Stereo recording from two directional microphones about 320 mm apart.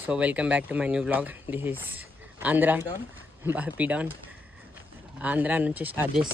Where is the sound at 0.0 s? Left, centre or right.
Centre.